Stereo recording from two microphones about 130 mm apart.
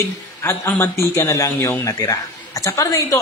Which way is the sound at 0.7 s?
20° left (ahead or behind).